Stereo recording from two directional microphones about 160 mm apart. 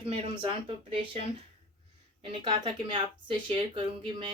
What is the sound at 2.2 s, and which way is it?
Speech, 30° right (ahead or behind).